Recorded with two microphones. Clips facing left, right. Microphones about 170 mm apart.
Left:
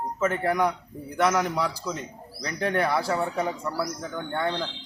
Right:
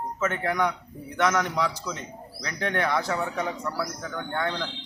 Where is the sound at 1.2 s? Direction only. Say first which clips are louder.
Left 1 dB; 5° left (ahead or behind).